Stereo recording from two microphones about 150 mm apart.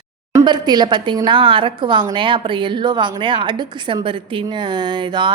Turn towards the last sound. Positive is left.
turn(degrees=-30)  # may be behind; listen again after turning